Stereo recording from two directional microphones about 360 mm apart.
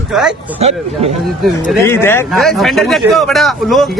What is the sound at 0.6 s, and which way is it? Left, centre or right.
Speech, centre.